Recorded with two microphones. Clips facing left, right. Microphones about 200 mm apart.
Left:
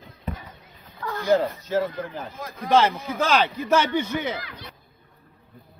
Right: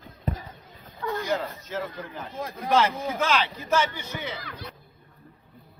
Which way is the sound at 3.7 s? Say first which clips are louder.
Left 4 dB; 65° left (ahead or behind).